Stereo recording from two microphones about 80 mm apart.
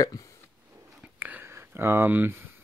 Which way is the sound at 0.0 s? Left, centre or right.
Left.